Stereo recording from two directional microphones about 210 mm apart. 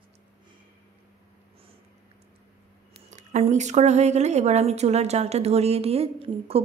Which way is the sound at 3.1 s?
35° right (ahead or behind).